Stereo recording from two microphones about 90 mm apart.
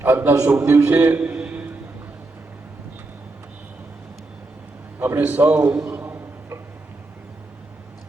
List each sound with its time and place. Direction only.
0.0 s a man's voice: 25° right (ahead or behind)
4.9 s a man's voice: 20° right (ahead or behind)
5.7 s a sound: 25° right (ahead or behind)